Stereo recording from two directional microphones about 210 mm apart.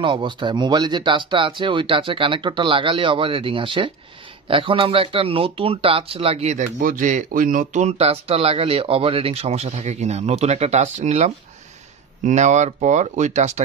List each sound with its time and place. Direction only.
0.0 s speech: 25° right (ahead or behind)